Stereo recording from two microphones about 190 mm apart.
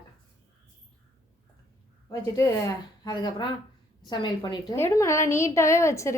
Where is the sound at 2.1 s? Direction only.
15° left (ahead or behind).